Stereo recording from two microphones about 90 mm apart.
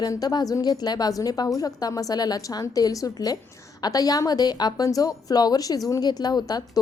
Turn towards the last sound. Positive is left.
turn(degrees=45)  # may be behind; listen again after turning